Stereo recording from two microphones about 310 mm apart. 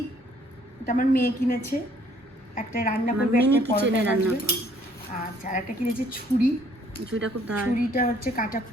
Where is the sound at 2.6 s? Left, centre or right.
Left.